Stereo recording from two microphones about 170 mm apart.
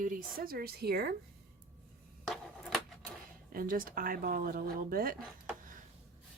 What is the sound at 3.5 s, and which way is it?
Speech, 55° right (ahead or behind).